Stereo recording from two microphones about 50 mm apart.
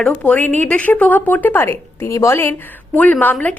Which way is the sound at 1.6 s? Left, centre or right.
Left.